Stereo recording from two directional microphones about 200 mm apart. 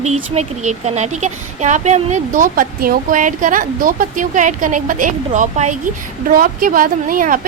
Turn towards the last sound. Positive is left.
turn(degrees=-45)  # may be behind; listen again after turning